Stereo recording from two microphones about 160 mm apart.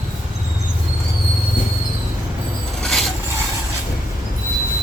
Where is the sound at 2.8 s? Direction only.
Centre (ahead or behind).